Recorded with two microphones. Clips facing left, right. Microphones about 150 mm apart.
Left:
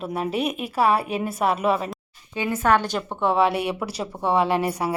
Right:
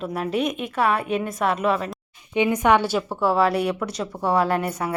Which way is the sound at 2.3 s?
20° right (ahead or behind).